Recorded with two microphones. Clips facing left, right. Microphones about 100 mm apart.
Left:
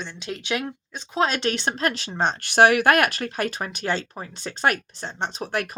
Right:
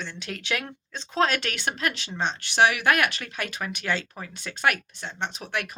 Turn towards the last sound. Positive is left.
turn(degrees=40)  # may be behind; listen again after turning